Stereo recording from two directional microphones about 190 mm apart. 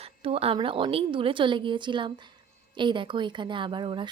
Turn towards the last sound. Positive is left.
turn(degrees=-25)  # may be behind; listen again after turning